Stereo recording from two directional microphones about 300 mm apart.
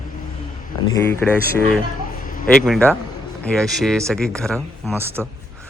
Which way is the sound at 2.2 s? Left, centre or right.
Left.